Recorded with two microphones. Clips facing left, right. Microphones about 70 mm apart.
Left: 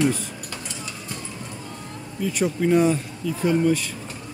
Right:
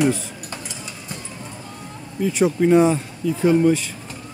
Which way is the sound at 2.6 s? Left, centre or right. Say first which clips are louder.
Right 3 dB; centre.